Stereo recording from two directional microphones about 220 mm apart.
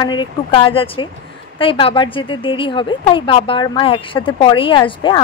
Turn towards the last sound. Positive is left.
turn(degrees=20)  # may be behind; listen again after turning